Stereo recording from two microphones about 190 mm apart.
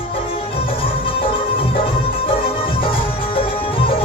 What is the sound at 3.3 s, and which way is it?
Music, 30° left (ahead or behind).